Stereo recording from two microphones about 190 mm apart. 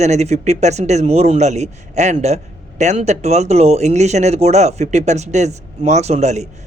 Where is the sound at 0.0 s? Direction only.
35° right (ahead or behind).